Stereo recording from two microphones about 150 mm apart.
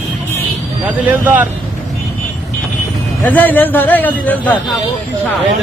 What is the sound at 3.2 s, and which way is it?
A man's voice, 10° left (ahead or behind).